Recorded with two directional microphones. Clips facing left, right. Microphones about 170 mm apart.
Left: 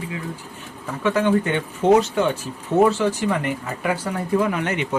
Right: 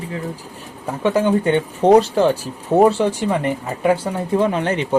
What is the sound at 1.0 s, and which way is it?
Speech, 35° right (ahead or behind).